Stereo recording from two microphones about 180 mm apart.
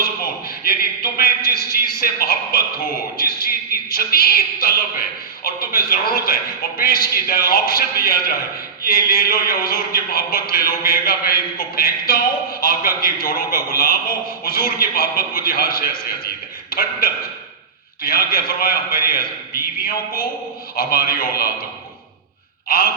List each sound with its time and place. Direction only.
0.6 s a man's voice: 55° left (ahead or behind)
16.2 s a sound: 55° left (ahead or behind)
18.0 s a man's voice: 55° left (ahead or behind)
22.7 s a man's voice: 55° left (ahead or behind)